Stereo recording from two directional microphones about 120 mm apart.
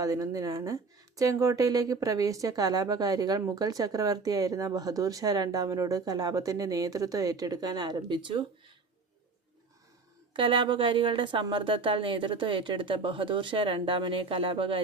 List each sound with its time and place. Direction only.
0.0 s speech: 30° right (ahead or behind)
10.3 s a woman's voice: 45° right (ahead or behind)